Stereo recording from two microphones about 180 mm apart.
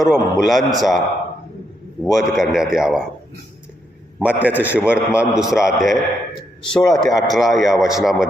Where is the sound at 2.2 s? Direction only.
Centre (ahead or behind).